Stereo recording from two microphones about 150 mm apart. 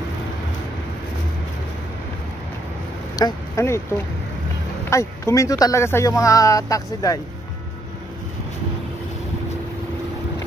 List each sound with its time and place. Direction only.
3.2 s speech: 20° left (ahead or behind)
4.8 s speech: 20° left (ahead or behind)